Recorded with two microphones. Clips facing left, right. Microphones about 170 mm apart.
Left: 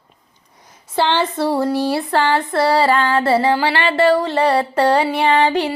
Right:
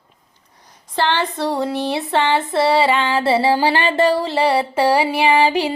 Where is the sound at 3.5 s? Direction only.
20° right (ahead or behind).